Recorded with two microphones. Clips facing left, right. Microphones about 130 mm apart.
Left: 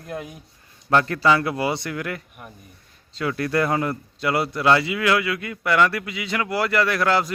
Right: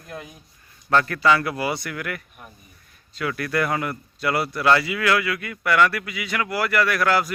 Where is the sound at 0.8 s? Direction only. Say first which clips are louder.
Left 1 dB; 25° left (ahead or behind).